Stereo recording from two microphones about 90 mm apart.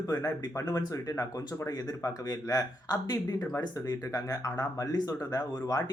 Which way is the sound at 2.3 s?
45° left (ahead or behind).